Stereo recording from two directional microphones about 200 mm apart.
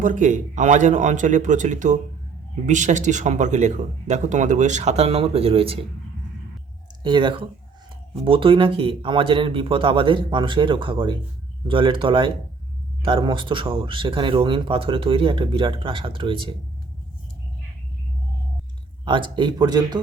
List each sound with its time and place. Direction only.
0.0 s speech: 40° right (ahead or behind)
7.0 s speech: 25° right (ahead or behind)
19.0 s speech: 25° right (ahead or behind)